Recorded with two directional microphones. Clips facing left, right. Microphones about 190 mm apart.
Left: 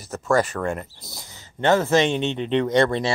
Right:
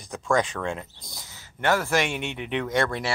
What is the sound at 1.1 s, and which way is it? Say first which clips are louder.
A man's voice: left 5 dB; 20° left (ahead or behind).